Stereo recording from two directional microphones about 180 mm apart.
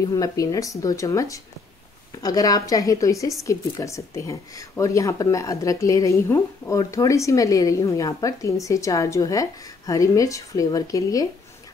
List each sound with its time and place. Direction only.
0.1 s speech: 20° left (ahead or behind)